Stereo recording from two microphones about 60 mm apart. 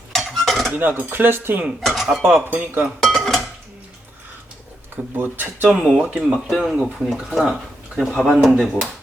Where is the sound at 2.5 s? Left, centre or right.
Right.